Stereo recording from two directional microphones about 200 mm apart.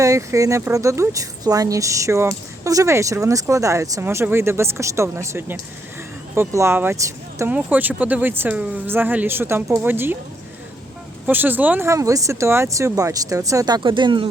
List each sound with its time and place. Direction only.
0.0 s speech: 15° right (ahead or behind)
11.3 s speech: 10° right (ahead or behind)